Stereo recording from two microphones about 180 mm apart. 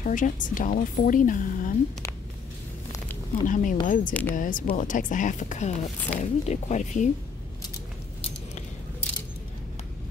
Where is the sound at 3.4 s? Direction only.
45° left (ahead or behind).